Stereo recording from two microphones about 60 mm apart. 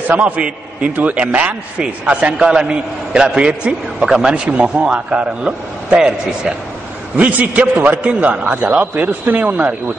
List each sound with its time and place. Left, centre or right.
0.1 s a man's voice: right
7.2 s a man's voice: right